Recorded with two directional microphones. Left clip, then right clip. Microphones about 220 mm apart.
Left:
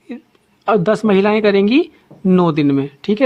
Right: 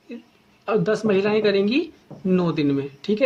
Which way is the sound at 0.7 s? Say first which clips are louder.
Left 7 dB; 40° left (ahead or behind).